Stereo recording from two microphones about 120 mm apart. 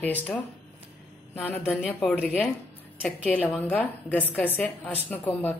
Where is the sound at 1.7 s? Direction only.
15° left (ahead or behind).